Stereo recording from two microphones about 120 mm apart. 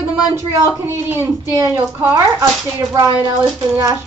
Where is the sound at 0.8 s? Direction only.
20° right (ahead or behind).